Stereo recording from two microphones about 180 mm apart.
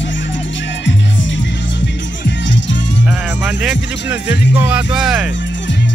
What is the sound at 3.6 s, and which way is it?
Speech, 10° right (ahead or behind).